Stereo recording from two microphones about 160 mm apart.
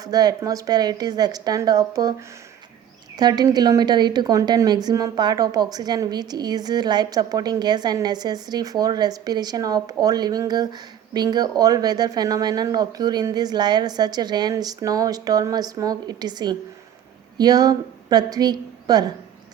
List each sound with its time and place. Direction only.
0.0 s a woman's voice: 25° right (ahead or behind)